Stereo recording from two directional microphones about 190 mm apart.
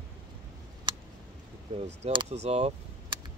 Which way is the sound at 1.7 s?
30° right (ahead or behind).